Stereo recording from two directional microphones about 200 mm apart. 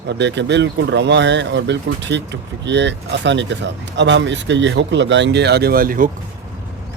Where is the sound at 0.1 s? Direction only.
60° right (ahead or behind); by 6.1 s 45° right (ahead or behind).